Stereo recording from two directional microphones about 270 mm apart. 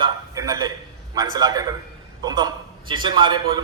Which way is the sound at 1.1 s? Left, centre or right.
Centre.